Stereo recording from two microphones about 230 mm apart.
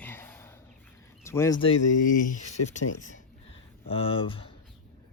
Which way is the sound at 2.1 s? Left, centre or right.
Left.